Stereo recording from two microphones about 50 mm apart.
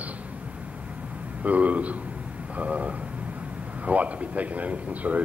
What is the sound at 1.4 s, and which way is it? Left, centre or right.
A man's voice, right.